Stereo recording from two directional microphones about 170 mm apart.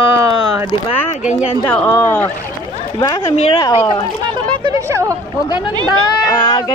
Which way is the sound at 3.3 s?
35° left (ahead or behind).